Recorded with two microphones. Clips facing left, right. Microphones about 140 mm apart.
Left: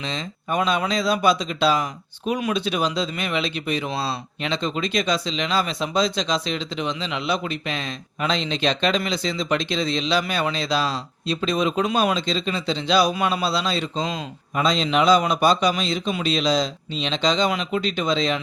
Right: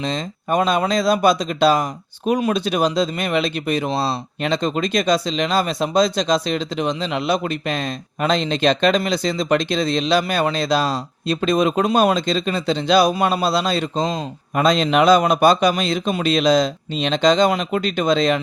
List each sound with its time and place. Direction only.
0.0 s speech: 45° right (ahead or behind)
14.5 s speech: 55° right (ahead or behind)